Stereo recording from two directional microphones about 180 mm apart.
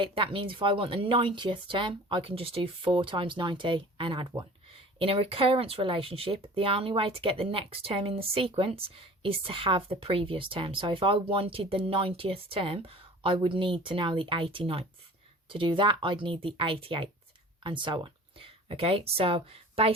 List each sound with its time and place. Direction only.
0.0 s a woman's voice: 30° right (ahead or behind)